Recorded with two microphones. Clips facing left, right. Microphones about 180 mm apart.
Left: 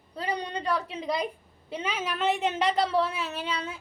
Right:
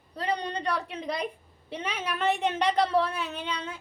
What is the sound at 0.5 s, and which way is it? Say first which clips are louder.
A woman's voice: left 1 dB; 5° left (ahead or behind).